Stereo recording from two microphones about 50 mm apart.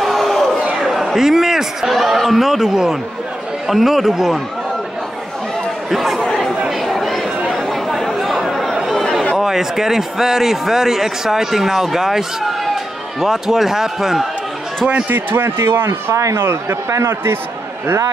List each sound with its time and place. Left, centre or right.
0.0 s a sound: centre
3.6 s a man's voice: centre
5.9 s chatter: centre
9.4 s a man's voice: centre
15.0 s speech: right